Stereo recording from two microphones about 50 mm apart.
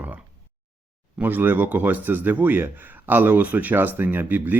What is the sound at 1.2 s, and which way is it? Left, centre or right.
Speech, right.